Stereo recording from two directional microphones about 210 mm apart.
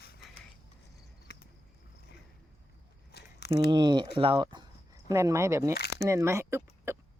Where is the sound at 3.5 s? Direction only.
20° right (ahead or behind).